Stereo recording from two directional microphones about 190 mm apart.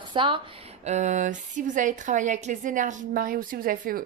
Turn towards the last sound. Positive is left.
turn(degrees=-50)  # may be behind; listen again after turning